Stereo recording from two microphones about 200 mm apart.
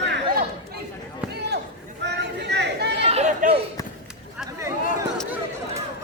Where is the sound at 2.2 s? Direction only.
60° right (ahead or behind).